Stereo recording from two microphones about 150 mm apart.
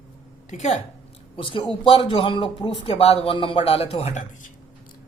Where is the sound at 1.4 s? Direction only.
35° left (ahead or behind); by 4.5 s 55° left (ahead or behind).